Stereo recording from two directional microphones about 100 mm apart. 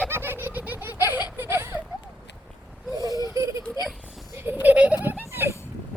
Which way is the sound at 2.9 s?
40° right (ahead or behind).